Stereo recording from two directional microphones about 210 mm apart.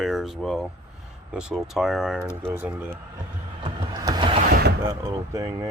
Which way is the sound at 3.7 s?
20° right (ahead or behind).